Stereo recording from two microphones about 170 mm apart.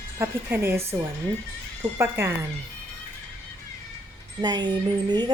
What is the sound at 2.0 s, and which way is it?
Speech, 15° right (ahead or behind).